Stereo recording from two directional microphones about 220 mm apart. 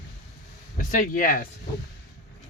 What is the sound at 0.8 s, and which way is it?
Speech, 35° left (ahead or behind).